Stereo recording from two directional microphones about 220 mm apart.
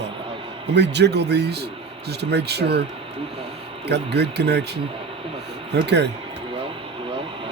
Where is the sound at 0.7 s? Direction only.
50° right (ahead or behind).